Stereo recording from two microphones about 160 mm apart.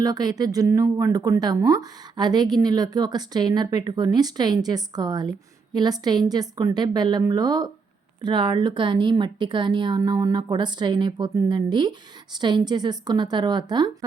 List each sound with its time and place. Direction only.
0.0 s a woman's voice: 25° right (ahead or behind)